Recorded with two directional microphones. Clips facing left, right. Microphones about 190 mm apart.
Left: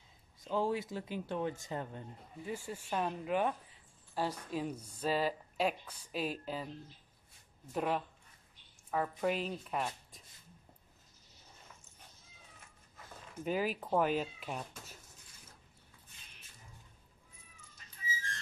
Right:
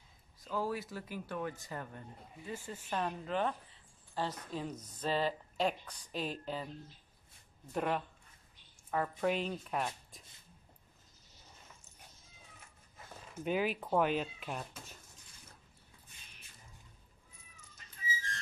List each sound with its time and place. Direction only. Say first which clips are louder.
0.4 s speech: left 3 dB; 25° left (ahead or behind); by 6.7 s 5° left (ahead or behind)
7.7 s speech: even; centre (ahead or behind)
13.4 s speech: right 1 dB; centre (ahead or behind)